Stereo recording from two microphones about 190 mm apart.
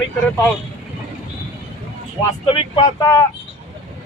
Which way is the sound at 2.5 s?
20° left (ahead or behind).